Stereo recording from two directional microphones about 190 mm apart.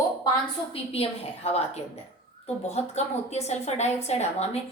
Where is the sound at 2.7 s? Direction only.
35° left (ahead or behind).